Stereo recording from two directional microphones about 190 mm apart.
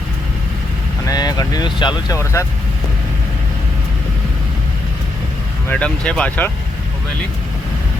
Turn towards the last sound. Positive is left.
turn(degrees=10)  # may be behind; listen again after turning